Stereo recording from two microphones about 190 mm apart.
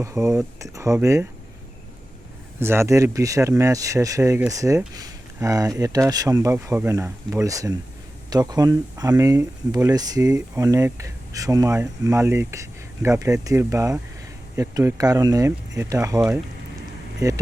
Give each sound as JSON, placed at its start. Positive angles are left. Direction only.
{"t": 0.0, "sound": "speech", "side_deg": -15}
{"t": 2.6, "sound": "speech", "side_deg": -15}